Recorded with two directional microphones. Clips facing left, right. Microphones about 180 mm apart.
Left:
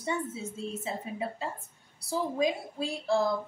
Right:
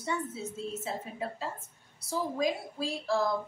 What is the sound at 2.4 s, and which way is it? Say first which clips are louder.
Speech: left 2 dB; 20° left (ahead or behind).